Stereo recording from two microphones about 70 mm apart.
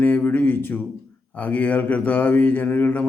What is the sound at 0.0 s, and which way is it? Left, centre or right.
Speech, left.